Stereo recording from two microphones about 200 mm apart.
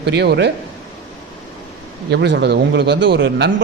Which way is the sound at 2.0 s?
55° right (ahead or behind).